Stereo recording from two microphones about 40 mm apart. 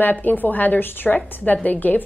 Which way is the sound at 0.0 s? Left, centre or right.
Left.